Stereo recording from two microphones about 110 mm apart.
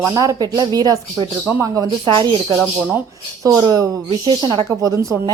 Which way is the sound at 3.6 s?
35° right (ahead or behind).